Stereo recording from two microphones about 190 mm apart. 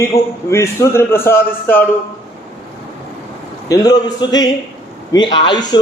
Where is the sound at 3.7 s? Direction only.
20° left (ahead or behind).